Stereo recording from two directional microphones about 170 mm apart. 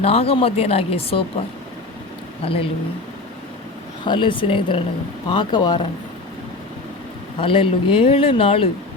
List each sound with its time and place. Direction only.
0.0 s speech: 35° left (ahead or behind)
2.4 s speech: 35° left (ahead or behind)
4.0 s speech: 30° left (ahead or behind)
7.3 s speech: 30° left (ahead or behind)